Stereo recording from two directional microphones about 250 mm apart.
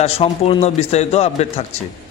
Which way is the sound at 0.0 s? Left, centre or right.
Left.